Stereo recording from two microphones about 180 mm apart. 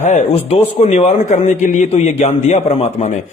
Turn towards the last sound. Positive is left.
turn(degrees=40)  # may be behind; listen again after turning